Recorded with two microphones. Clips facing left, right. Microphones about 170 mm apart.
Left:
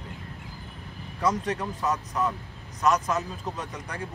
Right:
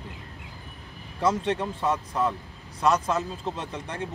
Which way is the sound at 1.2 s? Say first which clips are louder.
Right 2 dB; 25° right (ahead or behind).